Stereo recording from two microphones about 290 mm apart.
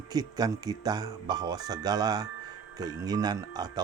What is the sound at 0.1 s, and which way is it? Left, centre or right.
Speech, centre.